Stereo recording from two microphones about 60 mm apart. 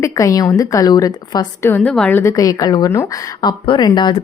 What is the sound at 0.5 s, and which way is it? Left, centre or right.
Speech, left.